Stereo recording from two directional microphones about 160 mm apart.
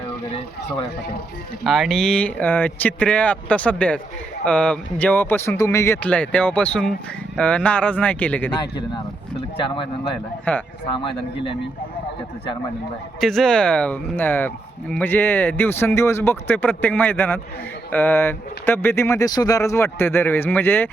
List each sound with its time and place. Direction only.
0.3 s speech: 35° left (ahead or behind)
1.6 s speech: centre (ahead or behind)
9.6 s speech: 30° left (ahead or behind)
10.5 s speech: 10° left (ahead or behind)
13.1 s speech: centre (ahead or behind)